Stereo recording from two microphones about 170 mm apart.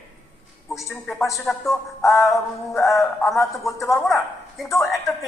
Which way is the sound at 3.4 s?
15° left (ahead or behind).